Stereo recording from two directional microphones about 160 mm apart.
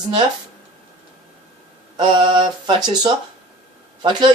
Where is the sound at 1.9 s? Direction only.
30° right (ahead or behind).